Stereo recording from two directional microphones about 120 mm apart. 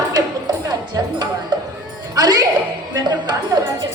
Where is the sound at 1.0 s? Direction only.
30° right (ahead or behind).